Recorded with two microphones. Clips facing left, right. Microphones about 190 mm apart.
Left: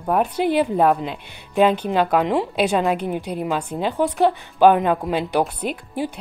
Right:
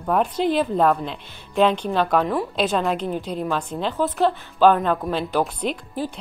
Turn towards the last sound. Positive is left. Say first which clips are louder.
# left 1 dB
turn(degrees=60)  # may be behind; listen again after turning